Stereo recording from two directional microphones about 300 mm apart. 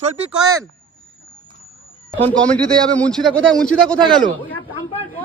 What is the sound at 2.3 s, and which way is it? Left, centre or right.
A man's voice, centre.